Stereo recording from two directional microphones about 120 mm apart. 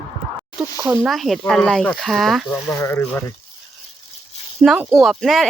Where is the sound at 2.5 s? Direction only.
25° left (ahead or behind).